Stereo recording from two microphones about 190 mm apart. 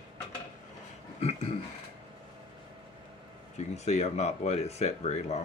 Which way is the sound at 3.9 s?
35° left (ahead or behind).